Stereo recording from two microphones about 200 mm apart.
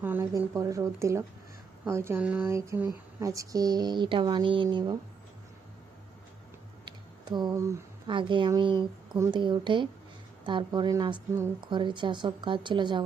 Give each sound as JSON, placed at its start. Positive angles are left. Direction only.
{"t": 0.0, "sound": "speech", "side_deg": -10}
{"t": 6.8, "sound": "a sound", "side_deg": -20}
{"t": 8.1, "sound": "a woman's voice", "side_deg": -25}